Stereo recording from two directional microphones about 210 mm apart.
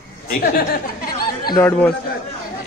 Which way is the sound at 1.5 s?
10° left (ahead or behind).